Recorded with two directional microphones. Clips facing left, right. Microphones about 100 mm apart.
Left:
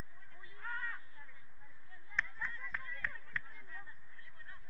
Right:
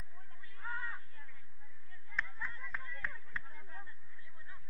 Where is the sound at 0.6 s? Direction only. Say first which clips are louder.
Right 1 dB; 15° right (ahead or behind).